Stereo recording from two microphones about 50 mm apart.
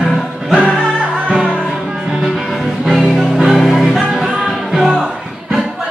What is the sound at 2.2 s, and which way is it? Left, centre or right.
Music, centre.